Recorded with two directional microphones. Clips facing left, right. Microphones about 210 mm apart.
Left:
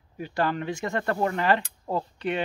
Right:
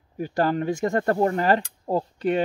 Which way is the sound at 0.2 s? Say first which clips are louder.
Right 4 dB; 45° right (ahead or behind).